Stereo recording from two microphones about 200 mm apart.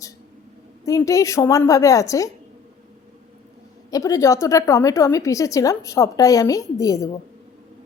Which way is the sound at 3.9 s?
15° left (ahead or behind).